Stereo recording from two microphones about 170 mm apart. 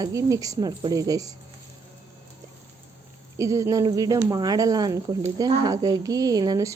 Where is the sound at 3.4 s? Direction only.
20° right (ahead or behind).